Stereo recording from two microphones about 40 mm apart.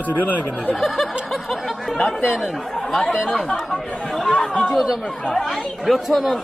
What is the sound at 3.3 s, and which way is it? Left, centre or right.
Speech, centre.